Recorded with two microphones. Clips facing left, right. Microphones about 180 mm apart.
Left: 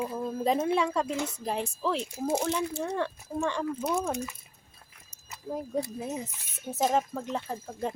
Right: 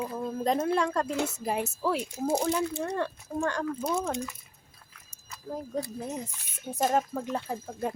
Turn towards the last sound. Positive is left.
turn(degrees=-5)  # may be behind; listen again after turning